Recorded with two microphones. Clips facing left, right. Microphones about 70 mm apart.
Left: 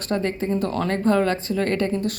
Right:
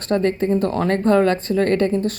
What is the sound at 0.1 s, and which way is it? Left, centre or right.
Speech, right.